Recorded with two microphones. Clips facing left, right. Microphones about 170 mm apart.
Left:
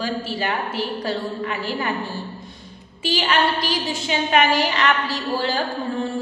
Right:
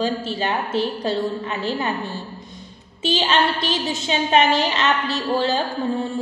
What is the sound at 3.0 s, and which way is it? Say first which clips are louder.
A woman's voice: right 1 dB; 25° right (ahead or behind).